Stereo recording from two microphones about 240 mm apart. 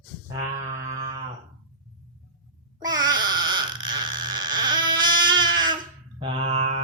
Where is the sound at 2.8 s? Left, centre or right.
Centre.